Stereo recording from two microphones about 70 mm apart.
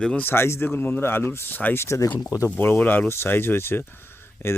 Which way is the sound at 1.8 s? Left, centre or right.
Left.